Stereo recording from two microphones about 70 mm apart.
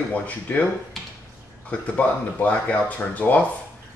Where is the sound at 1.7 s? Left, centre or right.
Centre.